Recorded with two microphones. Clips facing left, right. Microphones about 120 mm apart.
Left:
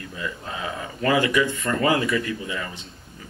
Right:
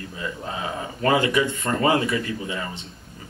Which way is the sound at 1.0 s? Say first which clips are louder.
Even; 30° right (ahead or behind).